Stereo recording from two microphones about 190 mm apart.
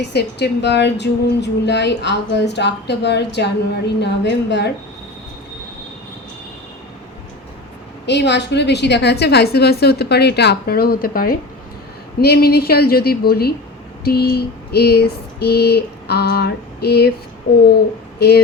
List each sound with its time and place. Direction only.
0.0 s speech: 60° left (ahead or behind)
8.0 s speech: 65° left (ahead or behind)
18.2 s speech: 60° left (ahead or behind)